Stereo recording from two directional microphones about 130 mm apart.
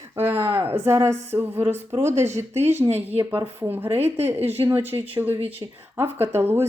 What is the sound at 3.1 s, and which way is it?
Speech, 45° right (ahead or behind).